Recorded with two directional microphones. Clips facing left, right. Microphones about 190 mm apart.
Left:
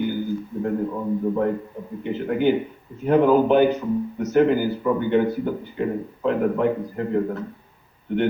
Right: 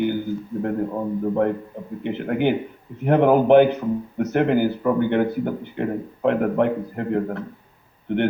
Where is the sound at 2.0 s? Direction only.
60° right (ahead or behind).